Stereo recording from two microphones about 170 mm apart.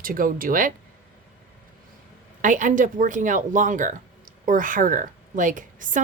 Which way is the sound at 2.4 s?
50° right (ahead or behind).